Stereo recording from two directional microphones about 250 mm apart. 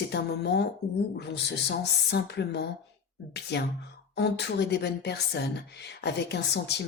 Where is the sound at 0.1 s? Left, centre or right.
Left.